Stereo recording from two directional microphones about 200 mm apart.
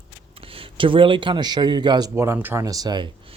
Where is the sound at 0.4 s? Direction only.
25° right (ahead or behind).